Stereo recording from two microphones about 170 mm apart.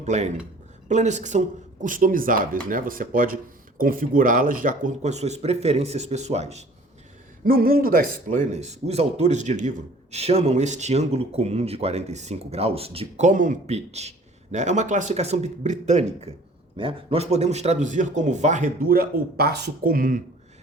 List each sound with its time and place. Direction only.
0.0 s a man's voice: 45° right (ahead or behind)
7.4 s a man's voice: 60° right (ahead or behind)